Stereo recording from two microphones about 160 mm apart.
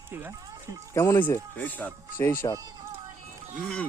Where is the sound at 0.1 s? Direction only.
15° right (ahead or behind).